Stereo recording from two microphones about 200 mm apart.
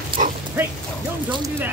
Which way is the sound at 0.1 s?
25° right (ahead or behind).